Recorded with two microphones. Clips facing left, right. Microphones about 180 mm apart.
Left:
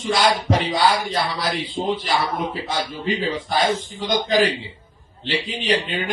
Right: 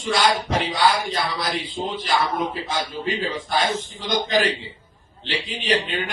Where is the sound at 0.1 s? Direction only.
45° left (ahead or behind).